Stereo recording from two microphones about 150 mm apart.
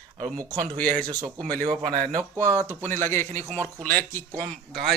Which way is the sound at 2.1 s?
20° right (ahead or behind).